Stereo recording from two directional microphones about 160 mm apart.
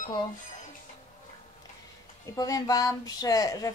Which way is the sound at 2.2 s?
20° left (ahead or behind).